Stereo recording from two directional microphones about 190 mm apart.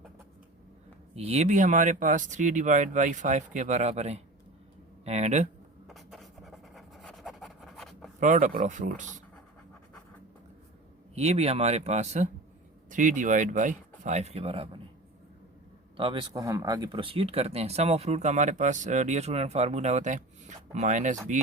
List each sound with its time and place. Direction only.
1.1 s speech: 30° right (ahead or behind)
5.9 s a sound: centre (ahead or behind)
8.2 s speech: 45° right (ahead or behind)
11.1 s speech: 35° right (ahead or behind)
16.0 s speech: 25° right (ahead or behind)